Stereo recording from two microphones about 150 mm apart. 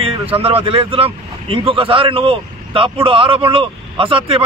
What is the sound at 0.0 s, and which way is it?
Speech, 40° right (ahead or behind).